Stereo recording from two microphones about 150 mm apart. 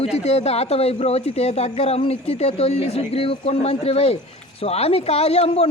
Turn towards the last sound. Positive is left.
turn(degrees=40)  # may be behind; listen again after turning